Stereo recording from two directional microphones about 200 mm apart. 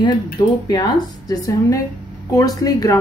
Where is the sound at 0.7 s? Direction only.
20° left (ahead or behind).